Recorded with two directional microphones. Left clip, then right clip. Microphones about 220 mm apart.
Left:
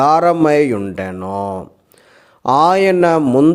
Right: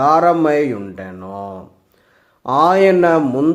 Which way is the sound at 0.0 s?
40° left (ahead or behind).